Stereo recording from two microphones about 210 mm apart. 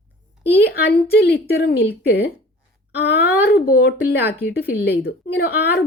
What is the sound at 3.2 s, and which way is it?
A woman's voice, 50° left (ahead or behind).